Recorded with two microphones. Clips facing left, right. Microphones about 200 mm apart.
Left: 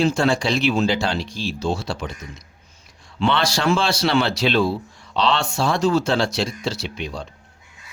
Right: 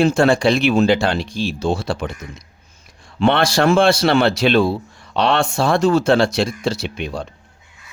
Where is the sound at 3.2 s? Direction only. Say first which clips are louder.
Right 5 dB; 55° right (ahead or behind).